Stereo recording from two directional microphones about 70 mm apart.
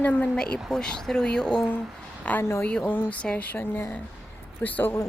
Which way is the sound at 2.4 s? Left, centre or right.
Left.